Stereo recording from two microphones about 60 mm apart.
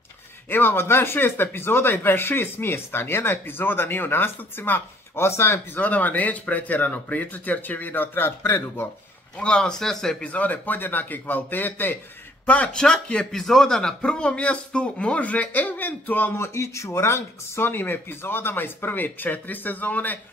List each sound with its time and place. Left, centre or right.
0.5 s speech: left
5.8 s speech: left
9.4 s speech: centre
10.2 s speech: left
12.4 s speech: left
16.3 s speech: left